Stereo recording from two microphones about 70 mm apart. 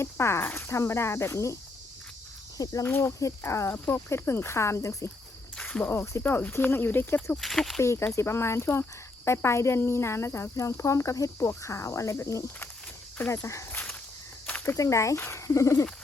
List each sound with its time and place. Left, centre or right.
0.0 s speech: left
2.8 s speech: left
5.5 s cricket: centre
5.9 s speech: left
7.4 s speech: centre
7.8 s speech: left
14.8 s speech: left